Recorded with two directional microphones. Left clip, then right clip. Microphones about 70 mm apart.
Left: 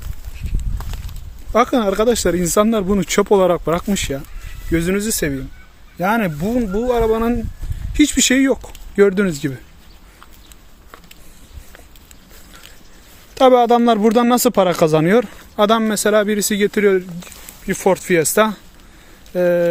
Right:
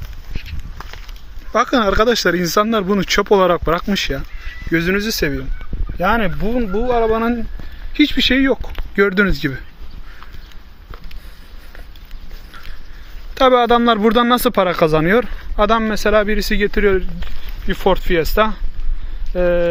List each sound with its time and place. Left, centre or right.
1.5 s speech: left
2.4 s speech: left
4.7 s speech: left
6.7 s speech: left
7.0 s speech: centre
7.9 s speech: left
8.6 s speech: centre
13.5 s speech: left
16.6 s speech: left
17.7 s speech: left
18.1 s speech: left
19.3 s speech: left